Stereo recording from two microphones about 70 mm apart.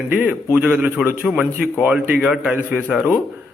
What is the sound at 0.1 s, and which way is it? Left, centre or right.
A man's voice, right.